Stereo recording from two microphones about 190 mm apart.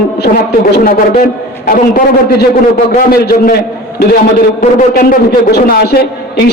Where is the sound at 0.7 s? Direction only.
50° left (ahead or behind).